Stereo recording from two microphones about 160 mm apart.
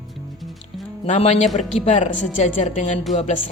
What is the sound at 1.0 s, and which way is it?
Speech, 40° left (ahead or behind).